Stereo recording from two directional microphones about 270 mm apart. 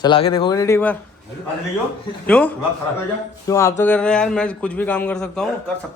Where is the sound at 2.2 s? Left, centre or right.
Centre.